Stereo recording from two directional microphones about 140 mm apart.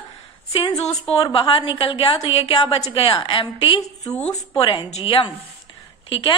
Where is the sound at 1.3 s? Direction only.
40° left (ahead or behind).